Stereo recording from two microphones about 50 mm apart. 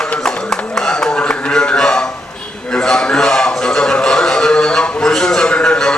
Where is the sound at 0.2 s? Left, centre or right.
Centre.